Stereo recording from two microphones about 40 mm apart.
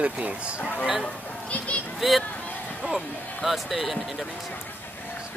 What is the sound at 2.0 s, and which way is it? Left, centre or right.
Speech, centre.